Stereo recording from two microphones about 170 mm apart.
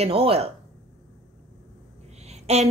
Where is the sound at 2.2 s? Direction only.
40° right (ahead or behind).